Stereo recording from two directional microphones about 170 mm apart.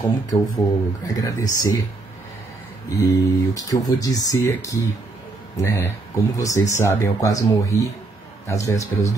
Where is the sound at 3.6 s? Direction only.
20° left (ahead or behind).